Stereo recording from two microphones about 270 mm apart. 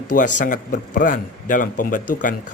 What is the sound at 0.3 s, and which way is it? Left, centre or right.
A man's voice, left.